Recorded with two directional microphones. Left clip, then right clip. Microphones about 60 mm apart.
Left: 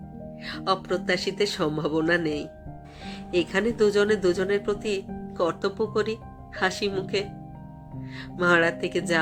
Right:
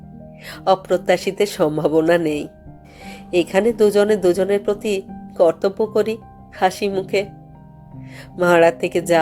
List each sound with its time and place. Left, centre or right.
0.4 s speech: right
3.0 s music: right
3.3 s speech: right
3.7 s speech: right
8.1 s speech: right